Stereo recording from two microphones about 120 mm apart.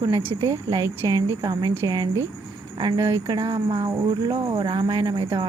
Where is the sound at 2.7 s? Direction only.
40° right (ahead or behind).